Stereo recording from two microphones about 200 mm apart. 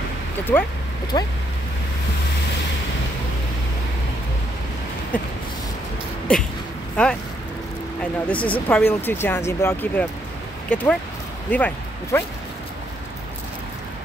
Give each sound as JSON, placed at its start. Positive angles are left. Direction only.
{"t": 1.1, "sound": "speech", "side_deg": 20}
{"t": 5.1, "sound": "speech", "side_deg": 5}
{"t": 6.3, "sound": "speech", "side_deg": 5}